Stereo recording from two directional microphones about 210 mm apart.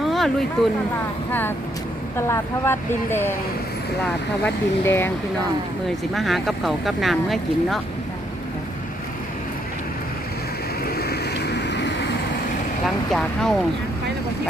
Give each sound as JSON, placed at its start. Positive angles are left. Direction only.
{"t": 0.0, "sound": "a sound", "side_deg": 0}
{"t": 1.3, "sound": "speech", "side_deg": 10}
{"t": 4.4, "sound": "speech", "side_deg": 10}
{"t": 6.1, "sound": "speech", "side_deg": 0}
{"t": 10.8, "sound": "vehicle", "side_deg": 50}
{"t": 13.1, "sound": "speech", "side_deg": 0}